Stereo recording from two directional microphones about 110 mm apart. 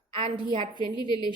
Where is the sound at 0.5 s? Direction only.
55° right (ahead or behind).